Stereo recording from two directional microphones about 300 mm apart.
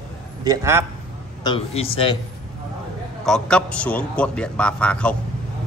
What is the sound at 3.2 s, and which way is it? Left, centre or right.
A man's voice, centre.